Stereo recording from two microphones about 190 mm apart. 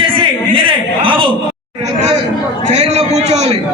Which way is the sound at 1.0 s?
25° right (ahead or behind).